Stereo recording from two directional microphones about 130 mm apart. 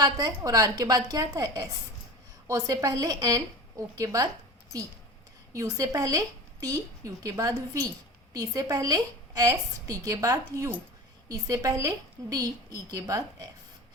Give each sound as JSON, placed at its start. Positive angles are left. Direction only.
{"t": 0.0, "sound": "a woman's voice", "side_deg": -30}
{"t": 5.5, "sound": "a woman's voice", "side_deg": -25}